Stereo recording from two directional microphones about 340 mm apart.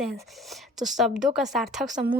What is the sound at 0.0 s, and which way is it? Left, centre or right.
A child's voice, centre.